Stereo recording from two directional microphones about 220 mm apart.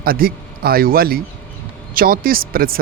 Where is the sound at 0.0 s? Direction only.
40° right (ahead or behind).